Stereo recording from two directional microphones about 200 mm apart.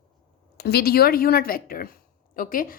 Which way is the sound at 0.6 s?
50° left (ahead or behind).